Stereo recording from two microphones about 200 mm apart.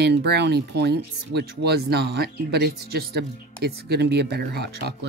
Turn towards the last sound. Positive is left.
turn(degrees=-55)  # may be behind; listen again after turning